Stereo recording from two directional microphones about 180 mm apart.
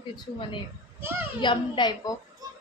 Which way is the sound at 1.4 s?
25° left (ahead or behind).